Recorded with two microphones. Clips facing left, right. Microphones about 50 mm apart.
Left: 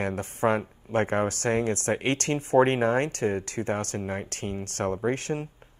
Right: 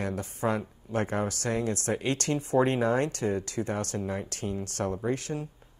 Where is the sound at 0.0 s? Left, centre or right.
Left.